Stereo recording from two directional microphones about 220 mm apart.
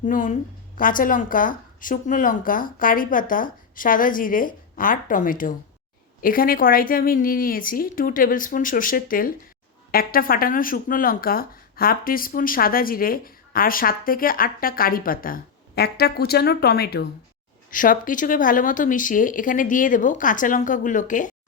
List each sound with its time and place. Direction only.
0.0 s speech: 35° left (ahead or behind)